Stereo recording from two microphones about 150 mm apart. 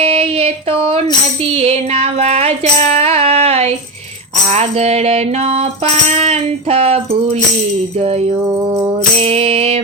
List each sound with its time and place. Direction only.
0.0 s a sound: 40° right (ahead or behind)
1.4 s music: 45° right (ahead or behind)
4.5 s mantra: 45° right (ahead or behind)
8.4 s music: 30° right (ahead or behind)